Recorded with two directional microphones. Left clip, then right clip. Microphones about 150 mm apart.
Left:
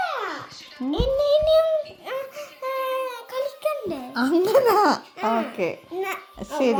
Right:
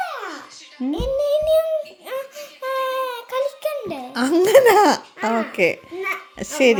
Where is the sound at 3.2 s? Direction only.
40° right (ahead or behind).